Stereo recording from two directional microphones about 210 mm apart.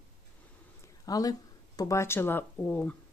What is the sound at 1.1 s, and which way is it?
Speech, 15° left (ahead or behind).